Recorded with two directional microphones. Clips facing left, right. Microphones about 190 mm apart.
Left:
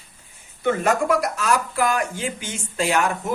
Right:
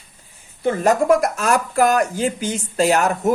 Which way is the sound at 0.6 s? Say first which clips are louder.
Right 4 dB; 40° right (ahead or behind).